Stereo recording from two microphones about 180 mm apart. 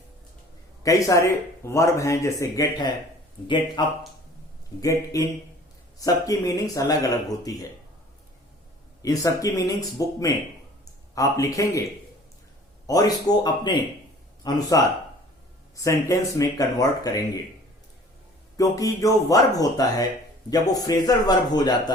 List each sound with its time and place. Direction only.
0.8 s a man's voice: 20° left (ahead or behind)
9.0 s speech: 20° left (ahead or behind)
12.9 s speech: 20° left (ahead or behind)
15.7 s speech: 15° left (ahead or behind)
18.5 s speech: 20° left (ahead or behind)